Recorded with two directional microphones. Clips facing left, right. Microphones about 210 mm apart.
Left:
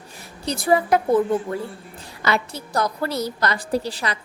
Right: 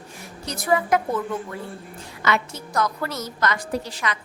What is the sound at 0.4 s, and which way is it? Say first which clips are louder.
A woman's voice: left 3 dB; 30° left (ahead or behind).